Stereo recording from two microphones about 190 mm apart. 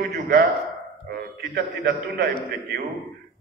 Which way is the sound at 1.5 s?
60° right (ahead or behind).